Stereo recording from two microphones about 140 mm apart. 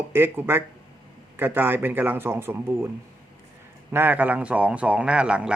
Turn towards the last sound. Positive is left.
turn(degrees=-5)  # may be behind; listen again after turning